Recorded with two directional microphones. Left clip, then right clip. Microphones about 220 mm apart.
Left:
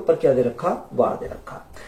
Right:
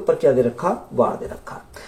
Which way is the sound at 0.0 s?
50° right (ahead or behind).